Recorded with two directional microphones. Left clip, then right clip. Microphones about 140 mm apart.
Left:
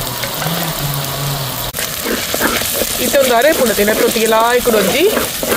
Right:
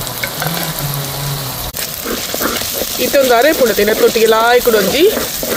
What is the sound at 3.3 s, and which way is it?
Speech, 90° right.